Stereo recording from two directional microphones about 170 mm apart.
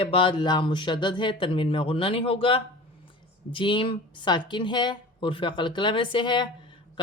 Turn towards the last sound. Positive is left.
turn(degrees=30)  # may be behind; listen again after turning